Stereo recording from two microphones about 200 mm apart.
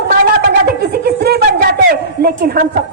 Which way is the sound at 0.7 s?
50° right (ahead or behind).